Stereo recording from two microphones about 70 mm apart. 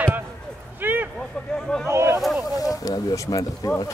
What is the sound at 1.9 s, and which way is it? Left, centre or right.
Speech, right.